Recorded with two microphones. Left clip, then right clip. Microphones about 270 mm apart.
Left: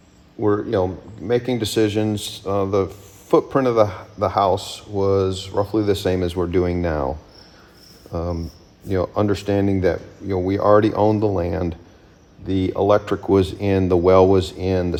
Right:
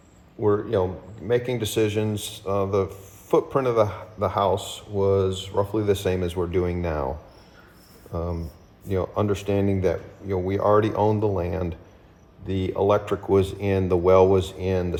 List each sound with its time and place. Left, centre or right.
0.3 s speech: left
8.1 s speech: left